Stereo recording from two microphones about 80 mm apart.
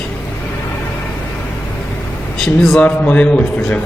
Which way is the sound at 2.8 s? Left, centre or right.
Centre.